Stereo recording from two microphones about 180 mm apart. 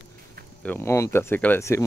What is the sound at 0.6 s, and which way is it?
Speech, 10° left (ahead or behind).